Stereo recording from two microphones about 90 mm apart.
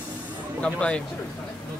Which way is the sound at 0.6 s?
10° left (ahead or behind).